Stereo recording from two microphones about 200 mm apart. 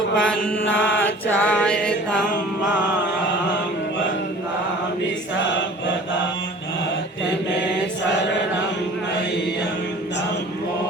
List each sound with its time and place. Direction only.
0.2 s mantra: 5° left (ahead or behind)